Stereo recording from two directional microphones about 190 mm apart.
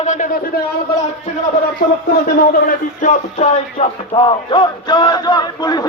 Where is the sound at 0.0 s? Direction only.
40° left (ahead or behind).